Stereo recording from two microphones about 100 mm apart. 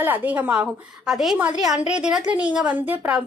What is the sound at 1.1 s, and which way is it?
A woman's voice, centre (ahead or behind).